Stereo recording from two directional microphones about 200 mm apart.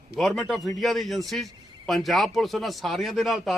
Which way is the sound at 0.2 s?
Centre (ahead or behind).